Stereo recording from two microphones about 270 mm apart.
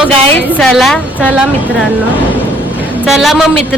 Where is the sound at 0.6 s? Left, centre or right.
Centre.